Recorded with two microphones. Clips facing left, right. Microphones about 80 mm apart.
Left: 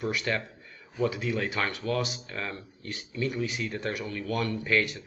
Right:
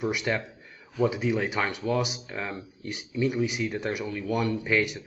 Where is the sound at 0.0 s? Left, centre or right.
Centre.